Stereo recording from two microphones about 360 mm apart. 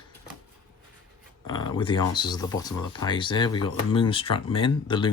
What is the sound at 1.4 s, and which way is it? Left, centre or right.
Speech, centre.